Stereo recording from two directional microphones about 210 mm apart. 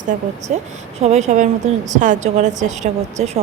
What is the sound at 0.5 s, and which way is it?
A woman's voice, 35° right (ahead or behind).